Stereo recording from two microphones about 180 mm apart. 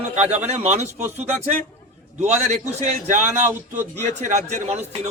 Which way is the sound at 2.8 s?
40° right (ahead or behind).